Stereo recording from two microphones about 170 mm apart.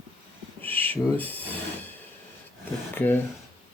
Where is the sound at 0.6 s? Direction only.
10° left (ahead or behind).